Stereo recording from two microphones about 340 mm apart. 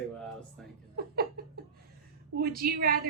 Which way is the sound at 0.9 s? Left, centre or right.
Right.